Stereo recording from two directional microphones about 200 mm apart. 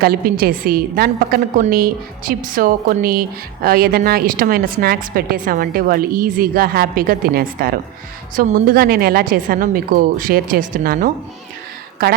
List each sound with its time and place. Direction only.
0.0 s a woman's voice: 50° right (ahead or behind)